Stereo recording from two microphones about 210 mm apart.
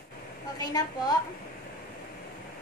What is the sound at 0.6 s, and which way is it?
Speech, 20° left (ahead or behind).